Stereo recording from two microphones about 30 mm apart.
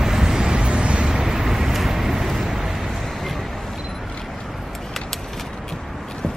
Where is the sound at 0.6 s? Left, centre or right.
Right.